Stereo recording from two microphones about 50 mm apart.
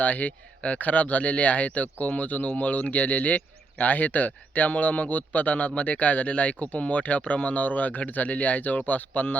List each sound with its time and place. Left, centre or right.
0.0 s speech: left